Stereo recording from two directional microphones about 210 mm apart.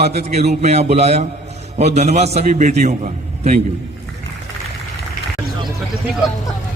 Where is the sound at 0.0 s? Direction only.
30° right (ahead or behind).